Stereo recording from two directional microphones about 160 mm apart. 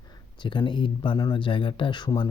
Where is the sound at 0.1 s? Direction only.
30° left (ahead or behind).